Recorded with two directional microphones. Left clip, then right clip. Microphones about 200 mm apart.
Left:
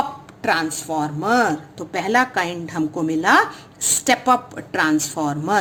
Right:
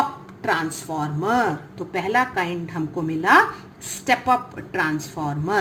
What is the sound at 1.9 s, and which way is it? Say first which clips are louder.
A woman's voice: left 3 dB; 55° left (ahead or behind).